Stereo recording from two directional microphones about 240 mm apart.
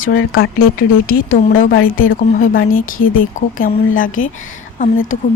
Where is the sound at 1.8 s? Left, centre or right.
Left.